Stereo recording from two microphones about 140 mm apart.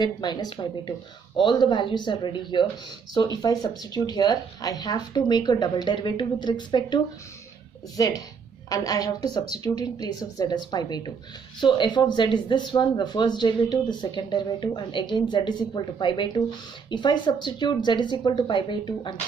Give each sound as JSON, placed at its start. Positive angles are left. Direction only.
{"t": 0.0, "sound": "speech", "side_deg": 30}
{"t": 8.0, "sound": "speech", "side_deg": 25}